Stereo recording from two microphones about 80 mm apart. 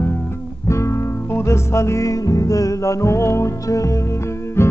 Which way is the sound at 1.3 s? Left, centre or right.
Left.